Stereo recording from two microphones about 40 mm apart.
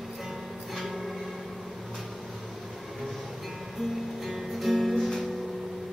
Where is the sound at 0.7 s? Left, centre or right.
Centre.